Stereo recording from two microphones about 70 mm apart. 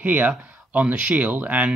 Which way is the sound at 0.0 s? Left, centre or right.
Right.